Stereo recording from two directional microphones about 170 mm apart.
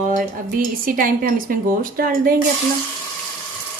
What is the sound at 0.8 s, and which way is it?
A woman's voice, 55° right (ahead or behind).